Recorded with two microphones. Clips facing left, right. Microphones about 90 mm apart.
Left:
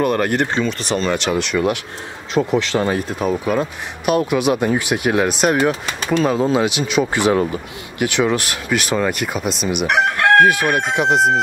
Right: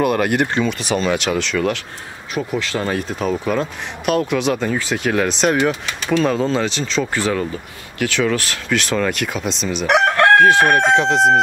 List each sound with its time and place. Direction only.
0.0 s speech: 5° right (ahead or behind)
1.4 s speech: 15° left (ahead or behind)
9.8 s chicken: 65° right (ahead or behind)
10.5 s crowing: 70° right (ahead or behind)
11.0 s speech: 5° left (ahead or behind)